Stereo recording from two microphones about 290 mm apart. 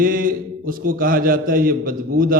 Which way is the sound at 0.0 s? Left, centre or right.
Right.